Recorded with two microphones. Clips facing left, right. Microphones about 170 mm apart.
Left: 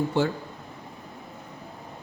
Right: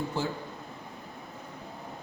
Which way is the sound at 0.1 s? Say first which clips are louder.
Left 8 dB; 70° left (ahead or behind).